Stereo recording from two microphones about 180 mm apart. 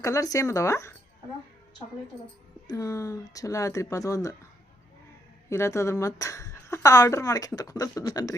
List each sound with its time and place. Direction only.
0.0 s a woman's voice: 15° left (ahead or behind)
2.6 s a woman's voice: 20° left (ahead or behind)
5.5 s a woman's voice: 15° left (ahead or behind)